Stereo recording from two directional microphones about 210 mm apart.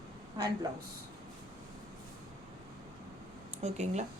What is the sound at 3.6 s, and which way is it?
Speech, 30° right (ahead or behind).